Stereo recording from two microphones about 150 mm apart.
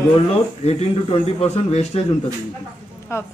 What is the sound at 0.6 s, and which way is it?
A man's voice, 45° left (ahead or behind).